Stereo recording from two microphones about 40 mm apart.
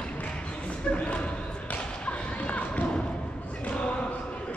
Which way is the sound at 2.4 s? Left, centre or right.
Left.